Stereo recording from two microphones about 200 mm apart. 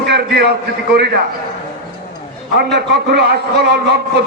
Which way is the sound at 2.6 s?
55° right (ahead or behind).